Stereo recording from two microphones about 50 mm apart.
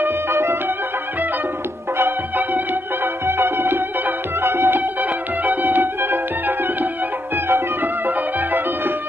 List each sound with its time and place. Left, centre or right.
0.0 s music: right
2.0 s music: right
5.4 s music: right